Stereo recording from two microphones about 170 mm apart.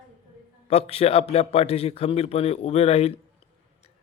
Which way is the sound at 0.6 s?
35° left (ahead or behind).